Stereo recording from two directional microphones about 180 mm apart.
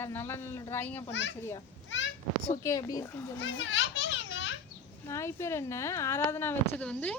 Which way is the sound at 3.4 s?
90° left.